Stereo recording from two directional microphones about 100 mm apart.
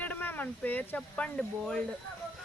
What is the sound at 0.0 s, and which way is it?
Speech, 20° left (ahead or behind).